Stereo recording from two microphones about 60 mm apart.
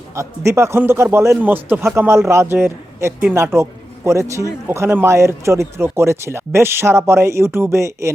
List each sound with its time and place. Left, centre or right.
0.2 s speech: right
1.4 s speech: right
2.0 s speech: right